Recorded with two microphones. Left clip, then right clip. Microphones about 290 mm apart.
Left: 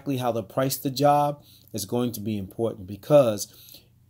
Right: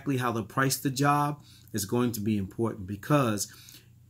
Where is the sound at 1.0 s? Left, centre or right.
Centre.